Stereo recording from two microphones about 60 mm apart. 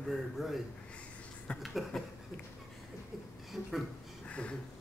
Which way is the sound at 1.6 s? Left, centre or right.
Centre.